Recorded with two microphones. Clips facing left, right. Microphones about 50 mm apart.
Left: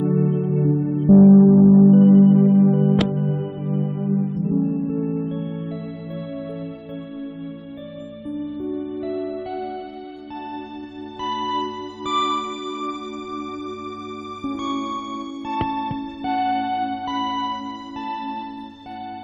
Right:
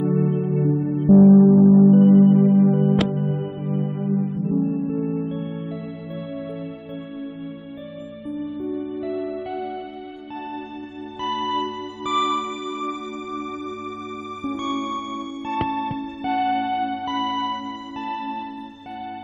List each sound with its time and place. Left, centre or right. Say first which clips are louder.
0.0 s music: left 1 dB; centre
8.3 s music: left 1 dB; centre
11.1 s music: even; centre
16.3 s music: even; centre